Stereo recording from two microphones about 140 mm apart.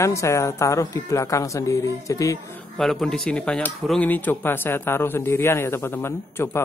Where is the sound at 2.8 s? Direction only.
5° left (ahead or behind).